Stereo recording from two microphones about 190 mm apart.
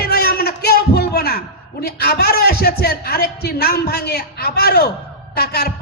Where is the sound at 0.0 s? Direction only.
55° left (ahead or behind).